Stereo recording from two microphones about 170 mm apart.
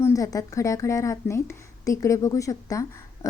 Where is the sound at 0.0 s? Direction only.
20° left (ahead or behind).